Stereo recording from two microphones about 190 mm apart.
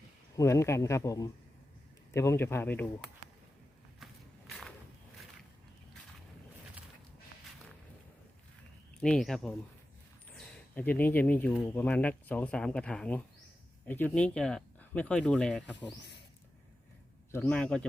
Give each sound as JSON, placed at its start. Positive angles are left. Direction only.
{"t": 0.3, "sound": "speech", "side_deg": 15}
{"t": 4.0, "sound": "walk", "side_deg": 0}
{"t": 9.0, "sound": "speech", "side_deg": 5}
{"t": 17.3, "sound": "speech", "side_deg": 10}